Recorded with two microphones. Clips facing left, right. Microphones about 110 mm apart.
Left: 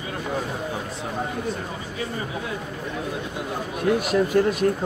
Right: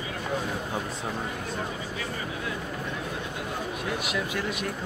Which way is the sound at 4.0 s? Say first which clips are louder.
Left 10 dB; 40° left (ahead or behind).